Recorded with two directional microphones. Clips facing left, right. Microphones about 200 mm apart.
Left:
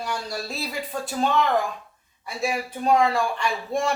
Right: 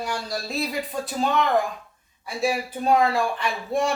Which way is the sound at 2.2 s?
Centre (ahead or behind).